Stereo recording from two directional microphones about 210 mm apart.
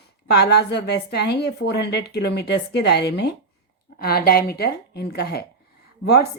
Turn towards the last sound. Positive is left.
turn(degrees=50)  # may be behind; listen again after turning